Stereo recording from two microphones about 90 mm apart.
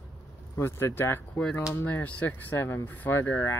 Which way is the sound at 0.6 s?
30° left (ahead or behind).